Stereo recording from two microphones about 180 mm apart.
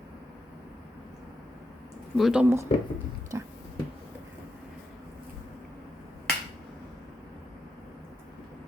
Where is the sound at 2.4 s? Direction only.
15° right (ahead or behind).